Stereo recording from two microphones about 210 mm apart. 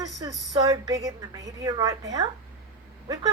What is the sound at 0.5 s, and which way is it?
A woman's voice, 15° right (ahead or behind).